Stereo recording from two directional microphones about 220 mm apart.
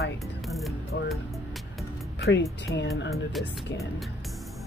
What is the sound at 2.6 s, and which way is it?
Speech, 50° left (ahead or behind).